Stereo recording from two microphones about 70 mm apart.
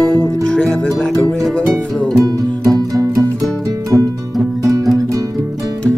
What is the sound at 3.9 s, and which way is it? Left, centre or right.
Music, right.